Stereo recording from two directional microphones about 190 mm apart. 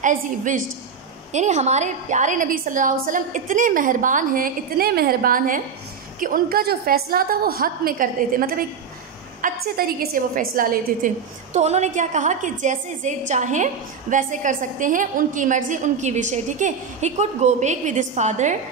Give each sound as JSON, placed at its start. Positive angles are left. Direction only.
{"t": 0.0, "sound": "a woman's voice", "side_deg": -40}
{"t": 11.5, "sound": "a woman's voice", "side_deg": -35}